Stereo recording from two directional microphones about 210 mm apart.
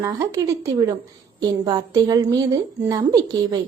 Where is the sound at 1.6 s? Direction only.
20° right (ahead or behind).